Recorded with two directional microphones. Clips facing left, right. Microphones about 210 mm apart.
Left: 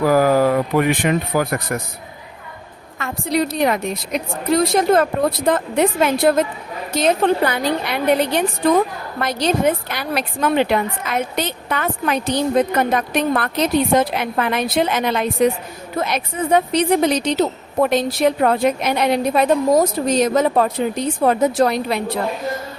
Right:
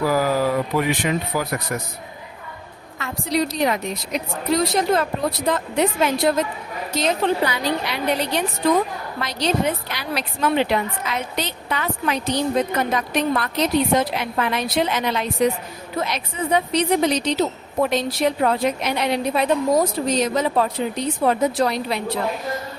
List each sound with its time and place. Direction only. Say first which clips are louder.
0.0 s a woman's voice: left 5 dB; 50° left (ahead or behind)
3.0 s a woman's voice: left 2 dB; 55° left (ahead or behind)